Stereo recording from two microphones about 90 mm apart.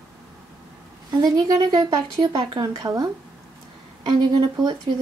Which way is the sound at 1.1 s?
50° right (ahead or behind).